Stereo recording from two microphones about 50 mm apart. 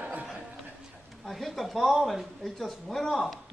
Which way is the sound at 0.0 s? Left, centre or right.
Right.